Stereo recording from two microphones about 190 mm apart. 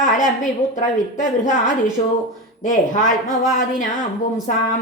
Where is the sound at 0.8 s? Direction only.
40° left (ahead or behind).